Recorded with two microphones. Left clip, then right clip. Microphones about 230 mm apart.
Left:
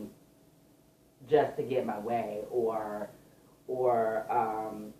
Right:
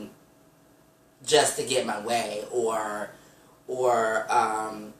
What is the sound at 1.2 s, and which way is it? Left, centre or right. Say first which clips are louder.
Speech: right 5 dB; right.